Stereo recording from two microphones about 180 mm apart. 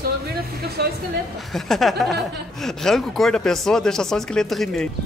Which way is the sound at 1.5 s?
Centre (ahead or behind).